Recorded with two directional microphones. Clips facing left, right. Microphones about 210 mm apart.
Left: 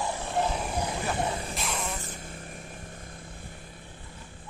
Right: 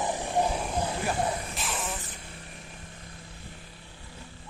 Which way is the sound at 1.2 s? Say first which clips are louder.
Right 1 dB; 25° left (ahead or behind).